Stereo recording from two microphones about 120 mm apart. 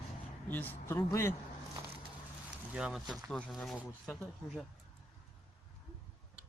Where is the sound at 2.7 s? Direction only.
5° right (ahead or behind).